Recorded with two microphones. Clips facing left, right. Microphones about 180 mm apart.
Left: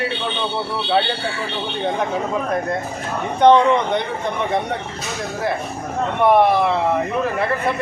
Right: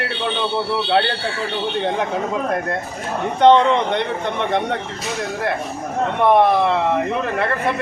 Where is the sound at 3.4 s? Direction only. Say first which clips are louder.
Even; centre (ahead or behind).